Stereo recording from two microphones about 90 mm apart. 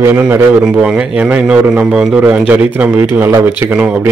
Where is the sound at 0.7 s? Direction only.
10° right (ahead or behind).